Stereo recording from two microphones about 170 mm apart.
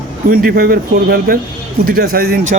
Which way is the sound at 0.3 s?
60° right (ahead or behind).